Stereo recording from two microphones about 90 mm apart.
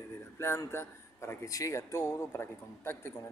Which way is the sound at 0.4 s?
30° left (ahead or behind).